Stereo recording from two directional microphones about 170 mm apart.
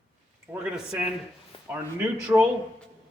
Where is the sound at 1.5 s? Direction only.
30° left (ahead or behind).